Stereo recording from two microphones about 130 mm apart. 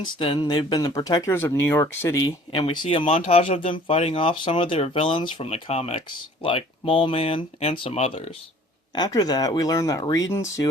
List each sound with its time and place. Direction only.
0.2 s speech: 45° left (ahead or behind)
0.4 s speech: 30° left (ahead or behind)
2.5 s speech: 40° left (ahead or behind)
9.0 s speech: 30° left (ahead or behind)